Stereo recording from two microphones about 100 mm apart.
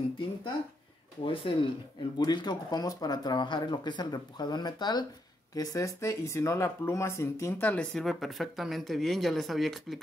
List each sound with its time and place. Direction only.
1.2 s speech: 60° left (ahead or behind)
2.1 s speech: 45° left (ahead or behind); by 7.7 s 25° left (ahead or behind)
7.7 s speech: 10° left (ahead or behind)
8.0 s speech: centre (ahead or behind)